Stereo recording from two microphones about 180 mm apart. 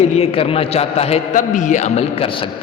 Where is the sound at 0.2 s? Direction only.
35° left (ahead or behind).